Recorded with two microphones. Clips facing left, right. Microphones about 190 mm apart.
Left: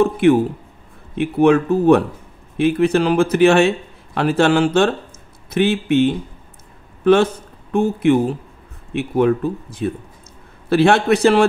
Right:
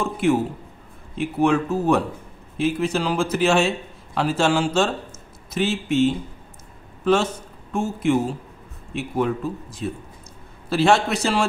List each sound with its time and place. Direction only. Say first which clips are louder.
0.0 s a man's voice: left 7 dB; 60° left (ahead or behind)
7.7 s a man's voice: left 6 dB; 60° left (ahead or behind)